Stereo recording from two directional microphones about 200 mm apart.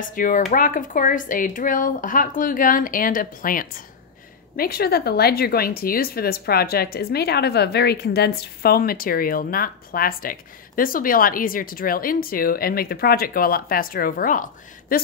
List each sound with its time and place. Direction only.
0.0 s a woman's voice: 40° left (ahead or behind)